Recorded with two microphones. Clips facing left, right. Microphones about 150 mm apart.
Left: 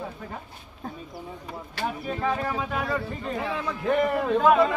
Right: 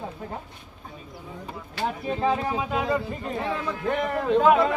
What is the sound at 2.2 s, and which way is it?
Speech, 20° right (ahead or behind).